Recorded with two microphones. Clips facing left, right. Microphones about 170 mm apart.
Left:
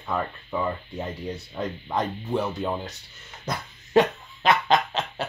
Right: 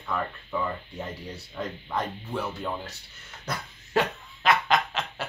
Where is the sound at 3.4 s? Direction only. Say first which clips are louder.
Left 3 dB; 20° left (ahead or behind).